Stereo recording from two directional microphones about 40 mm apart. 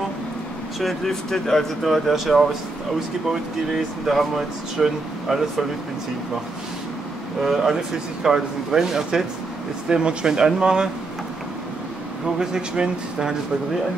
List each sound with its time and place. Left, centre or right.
0.7 s speech: centre
1.9 s speech: centre
7.4 s speech: centre
12.4 s speech: right